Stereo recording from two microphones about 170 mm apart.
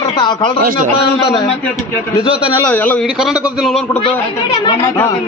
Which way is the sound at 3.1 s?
5° right (ahead or behind).